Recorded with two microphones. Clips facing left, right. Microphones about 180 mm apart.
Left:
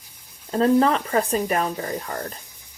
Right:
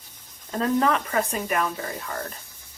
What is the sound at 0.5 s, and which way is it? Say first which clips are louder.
Speech: left 5 dB; 35° left (ahead or behind).